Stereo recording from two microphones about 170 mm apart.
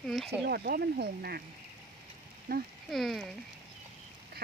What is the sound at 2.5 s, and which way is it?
Speech, 65° right (ahead or behind).